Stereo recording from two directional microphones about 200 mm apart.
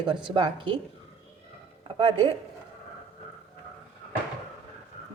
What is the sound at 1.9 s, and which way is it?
Speech, 25° right (ahead or behind).